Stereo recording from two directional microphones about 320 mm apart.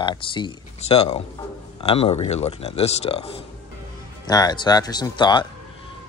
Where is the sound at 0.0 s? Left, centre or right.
Centre.